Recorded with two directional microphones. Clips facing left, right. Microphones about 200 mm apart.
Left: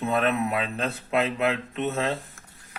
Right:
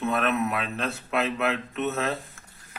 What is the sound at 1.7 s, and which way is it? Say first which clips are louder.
Speech: left 1 dB; 30° left (ahead or behind).